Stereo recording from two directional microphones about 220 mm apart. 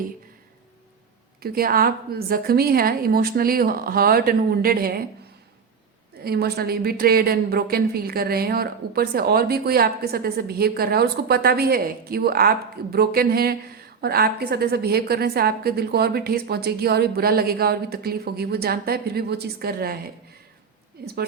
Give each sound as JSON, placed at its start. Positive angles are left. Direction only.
{"t": 1.4, "sound": "a woman's voice", "side_deg": -45}
{"t": 6.2, "sound": "a woman's voice", "side_deg": -45}
{"t": 21.0, "sound": "a woman's voice", "side_deg": -45}